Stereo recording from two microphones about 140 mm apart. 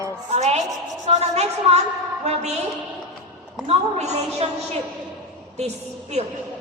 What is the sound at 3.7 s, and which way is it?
A woman's voice, 50° right (ahead or behind).